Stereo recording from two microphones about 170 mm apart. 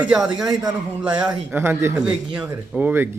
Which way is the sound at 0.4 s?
25° right (ahead or behind).